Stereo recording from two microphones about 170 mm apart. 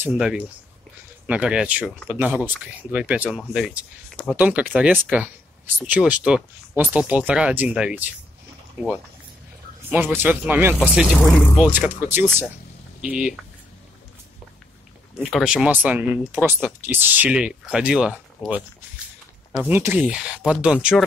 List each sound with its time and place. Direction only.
0.1 s speech: 5° right (ahead or behind)
9.8 s speech: 10° right (ahead or behind)
11.2 s speech: 20° left (ahead or behind)
11.6 s speech: 10° right (ahead or behind)
15.1 s speech: centre (ahead or behind)
19.5 s speech: 10° right (ahead or behind)